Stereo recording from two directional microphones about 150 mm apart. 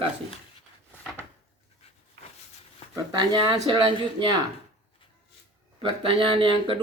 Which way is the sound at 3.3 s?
30° right (ahead or behind).